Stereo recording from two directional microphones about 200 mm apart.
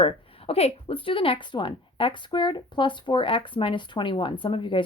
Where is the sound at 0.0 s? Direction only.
30° left (ahead or behind).